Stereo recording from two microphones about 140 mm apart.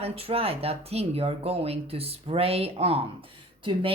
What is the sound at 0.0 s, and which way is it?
Speech, 45° right (ahead or behind).